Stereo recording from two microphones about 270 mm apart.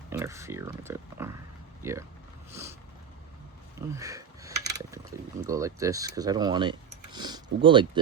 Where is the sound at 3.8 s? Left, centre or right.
Centre.